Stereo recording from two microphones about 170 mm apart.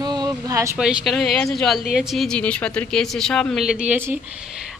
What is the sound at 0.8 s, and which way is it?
A woman's voice, centre (ahead or behind).